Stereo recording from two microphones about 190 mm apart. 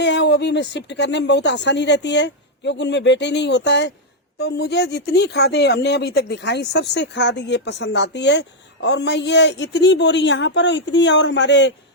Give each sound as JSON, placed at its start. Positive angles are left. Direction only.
{"t": 0.0, "sound": "speech", "side_deg": 65}